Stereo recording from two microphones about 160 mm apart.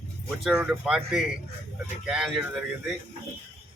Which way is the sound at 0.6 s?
5° right (ahead or behind).